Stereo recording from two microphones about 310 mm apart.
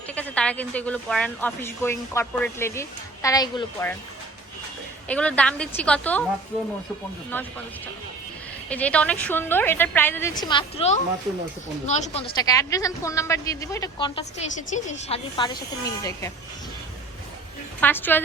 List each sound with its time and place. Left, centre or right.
0.1 s a woman's voice: centre
5.0 s a woman's voice: centre
7.3 s a woman's voice: centre
8.7 s a woman's voice: centre
17.7 s a woman's voice: centre